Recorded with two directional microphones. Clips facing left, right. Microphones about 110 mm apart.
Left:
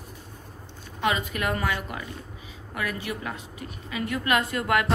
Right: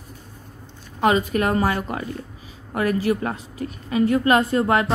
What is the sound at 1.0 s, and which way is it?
A woman's voice, 35° right (ahead or behind).